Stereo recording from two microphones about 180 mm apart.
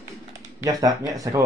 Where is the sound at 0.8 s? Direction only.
20° right (ahead or behind).